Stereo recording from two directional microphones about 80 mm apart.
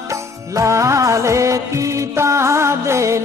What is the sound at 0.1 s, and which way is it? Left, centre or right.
Music, right.